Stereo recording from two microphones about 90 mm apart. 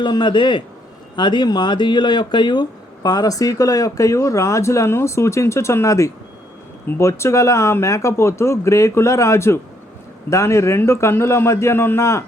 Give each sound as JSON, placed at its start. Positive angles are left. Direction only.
{"t": 0.0, "sound": "a man's voice", "side_deg": 60}